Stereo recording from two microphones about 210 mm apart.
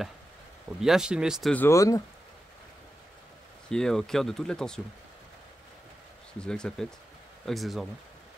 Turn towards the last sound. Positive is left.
turn(degrees=0)  # may be behind; listen again after turning